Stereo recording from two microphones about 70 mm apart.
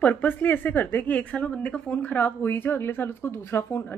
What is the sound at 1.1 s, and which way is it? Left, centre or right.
Speech, centre.